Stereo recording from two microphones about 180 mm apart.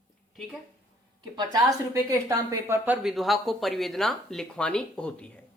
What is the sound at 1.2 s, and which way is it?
A woman's voice, 25° right (ahead or behind).